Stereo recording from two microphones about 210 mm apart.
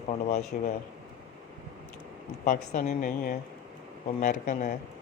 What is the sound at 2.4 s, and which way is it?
Speech, 40° left (ahead or behind).